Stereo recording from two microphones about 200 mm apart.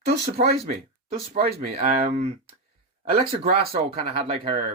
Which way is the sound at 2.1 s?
30° right (ahead or behind).